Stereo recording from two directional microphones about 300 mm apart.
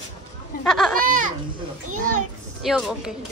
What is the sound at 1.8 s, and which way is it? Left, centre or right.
Speech, right.